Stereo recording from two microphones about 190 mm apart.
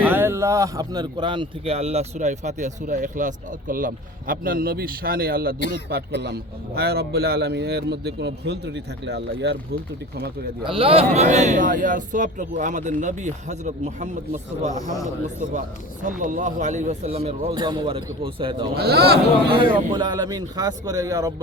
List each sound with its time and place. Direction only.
0.0 s speech: 10° right (ahead or behind); by 5.5 s 50° right (ahead or behind)
5.5 s speech: 65° left (ahead or behind)
5.9 s a man's voice: 55° right (ahead or behind)
10.6 s speech: 30° right (ahead or behind)
16.0 s speech: 40° right (ahead or behind)
18.8 s a man's voice: 60° right (ahead or behind)
19.5 s speech: 25° right (ahead or behind)